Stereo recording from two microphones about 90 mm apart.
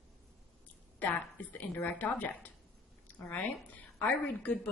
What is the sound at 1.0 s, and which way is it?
A woman's voice, 20° left (ahead or behind).